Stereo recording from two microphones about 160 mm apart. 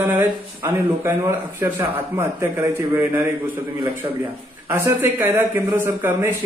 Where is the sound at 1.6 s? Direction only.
15° right (ahead or behind).